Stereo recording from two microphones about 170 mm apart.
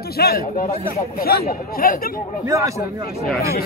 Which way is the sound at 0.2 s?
70° left (ahead or behind).